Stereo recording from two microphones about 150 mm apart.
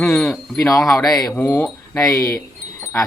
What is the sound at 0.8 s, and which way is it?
Speech, 5° left (ahead or behind).